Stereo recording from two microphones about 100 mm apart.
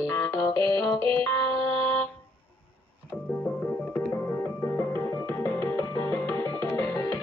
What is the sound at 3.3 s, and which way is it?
Music, 15° left (ahead or behind).